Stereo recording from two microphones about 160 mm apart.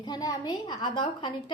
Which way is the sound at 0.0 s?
25° left (ahead or behind).